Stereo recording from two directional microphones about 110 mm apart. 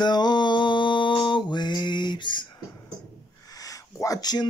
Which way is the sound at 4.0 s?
35° left (ahead or behind).